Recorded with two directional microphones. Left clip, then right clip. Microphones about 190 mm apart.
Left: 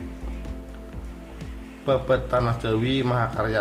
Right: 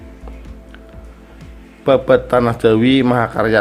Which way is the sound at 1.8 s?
45° right (ahead or behind).